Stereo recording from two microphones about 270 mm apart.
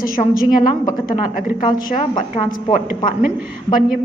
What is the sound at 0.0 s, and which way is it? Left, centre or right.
Speech, left.